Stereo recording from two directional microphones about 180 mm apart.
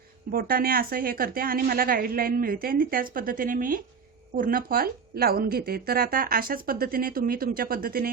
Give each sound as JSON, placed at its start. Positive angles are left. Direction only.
{"t": 0.3, "sound": "a woman's voice", "side_deg": -55}